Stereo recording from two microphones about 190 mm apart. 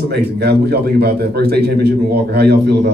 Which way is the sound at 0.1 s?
60° right (ahead or behind).